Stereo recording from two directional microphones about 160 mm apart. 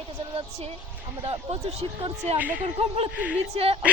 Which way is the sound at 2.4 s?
10° right (ahead or behind).